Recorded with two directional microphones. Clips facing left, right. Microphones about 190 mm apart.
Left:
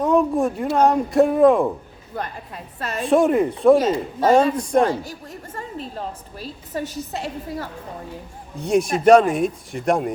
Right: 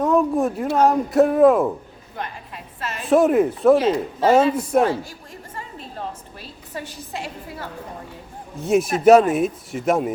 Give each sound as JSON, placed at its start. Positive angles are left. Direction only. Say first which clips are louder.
{"t": 0.0, "sound": "speech", "louder": "even", "side_deg": 0}
{"t": 3.0, "sound": "speech", "louder": "right 1 dB", "side_deg": 0}
{"t": 6.7, "sound": "a woman's voice", "louder": "left 4 dB", "side_deg": 40}
{"t": 8.6, "sound": "speech", "louder": "right 1 dB", "side_deg": -5}